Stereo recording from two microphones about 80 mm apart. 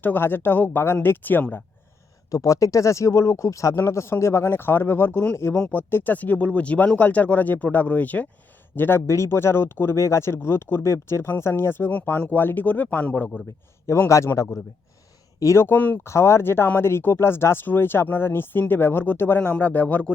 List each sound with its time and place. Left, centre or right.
0.0 s speech: left
2.3 s speech: left
14.3 s speech: left
15.6 s speech: left
16.0 s speech: left; by 20.1 s centre